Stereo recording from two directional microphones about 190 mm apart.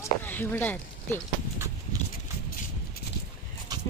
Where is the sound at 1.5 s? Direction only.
15° right (ahead or behind).